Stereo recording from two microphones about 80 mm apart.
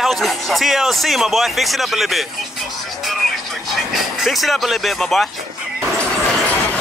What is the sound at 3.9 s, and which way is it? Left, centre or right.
Speech, centre.